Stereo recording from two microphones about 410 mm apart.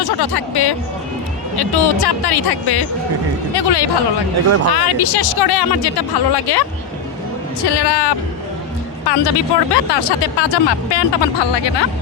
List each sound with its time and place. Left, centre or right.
0.0 s a woman's voice: left
4.4 s speech: right
4.7 s speech: left
7.7 s a woman's voice: left